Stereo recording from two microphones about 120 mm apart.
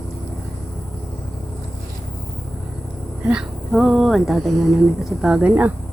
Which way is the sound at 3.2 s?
5° right (ahead or behind).